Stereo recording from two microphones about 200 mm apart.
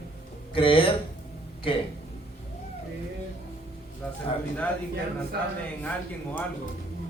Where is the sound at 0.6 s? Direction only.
25° left (ahead or behind).